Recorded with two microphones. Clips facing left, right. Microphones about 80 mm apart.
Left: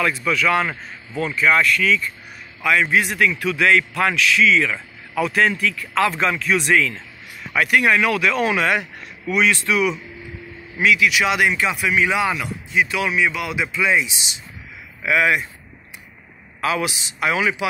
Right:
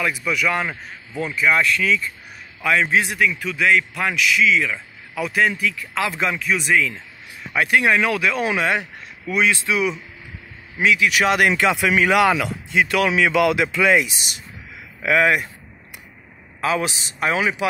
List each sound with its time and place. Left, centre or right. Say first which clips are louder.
0.0 s a man's voice: left 2 dB; centre
1.6 s speech: left 1 dB; right
3.2 s a man's voice: left 2 dB; centre
6.4 s a man's voice: left 1 dB; centre
7.5 s speech: even; right
11.1 s speech: right 1 dB; right
11.5 s a man's voice: right 3 dB; right
12.0 s a man's voice: right 4 dB; right
14.1 s speech: even; right
16.6 s speech: even; right